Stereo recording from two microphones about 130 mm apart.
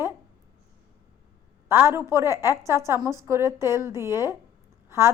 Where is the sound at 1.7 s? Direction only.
20° right (ahead or behind).